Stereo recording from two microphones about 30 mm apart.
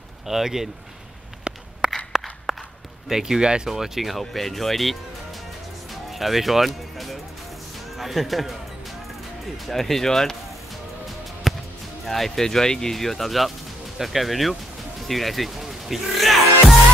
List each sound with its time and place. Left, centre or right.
0.3 s speech: centre
2.1 s walk: centre
3.1 s speech: centre
4.2 s speech: centre
6.1 s speech: centre
9.7 s speech: centre
10.0 s speech: centre
11.5 s music: centre
12.1 s speech: centre
12.9 s speech: centre